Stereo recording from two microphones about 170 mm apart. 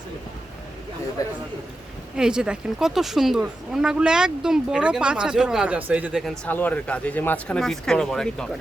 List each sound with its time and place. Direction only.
1.2 s a man's voice: 20° left (ahead or behind)
2.1 s speech: 5° right (ahead or behind)
6.5 s speech: 10° left (ahead or behind)